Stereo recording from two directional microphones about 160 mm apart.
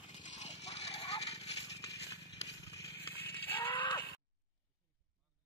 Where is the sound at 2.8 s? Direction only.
15° left (ahead or behind).